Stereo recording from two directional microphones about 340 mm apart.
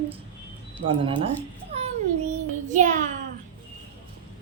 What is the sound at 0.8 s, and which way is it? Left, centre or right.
Speech, right.